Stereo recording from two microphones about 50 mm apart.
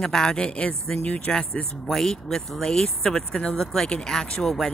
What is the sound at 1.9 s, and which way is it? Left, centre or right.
Speech, centre.